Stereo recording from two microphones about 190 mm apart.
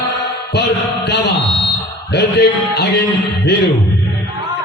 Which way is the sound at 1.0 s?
60° left (ahead or behind).